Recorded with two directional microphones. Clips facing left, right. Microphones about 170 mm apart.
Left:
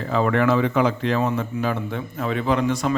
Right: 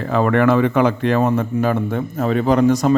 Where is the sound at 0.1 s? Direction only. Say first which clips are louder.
Right 4 dB; 55° right (ahead or behind).